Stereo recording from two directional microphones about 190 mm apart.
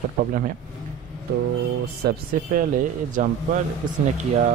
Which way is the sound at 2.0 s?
45° right (ahead or behind).